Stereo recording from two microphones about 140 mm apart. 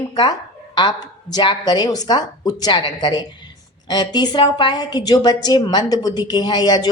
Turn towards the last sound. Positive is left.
turn(degrees=30)  # may be behind; listen again after turning